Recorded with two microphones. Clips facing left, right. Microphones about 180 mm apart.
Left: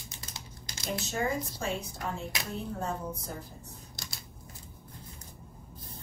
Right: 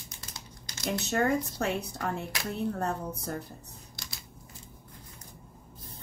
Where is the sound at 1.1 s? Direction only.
65° right (ahead or behind).